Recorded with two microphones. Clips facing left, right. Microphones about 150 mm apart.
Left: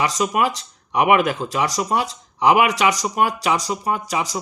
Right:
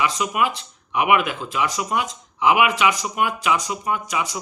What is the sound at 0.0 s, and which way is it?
Speech, 40° left (ahead or behind).